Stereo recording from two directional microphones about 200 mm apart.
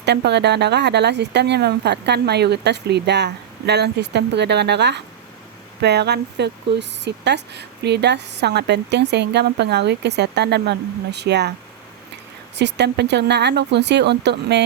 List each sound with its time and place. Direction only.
0.0 s speech: 55° right (ahead or behind)
12.5 s speech: 60° right (ahead or behind)